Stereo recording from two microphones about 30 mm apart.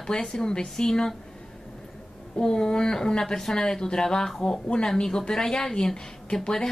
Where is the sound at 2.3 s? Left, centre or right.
Left.